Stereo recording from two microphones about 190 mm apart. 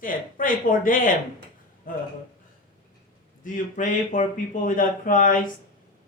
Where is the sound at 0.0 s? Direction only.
45° left (ahead or behind).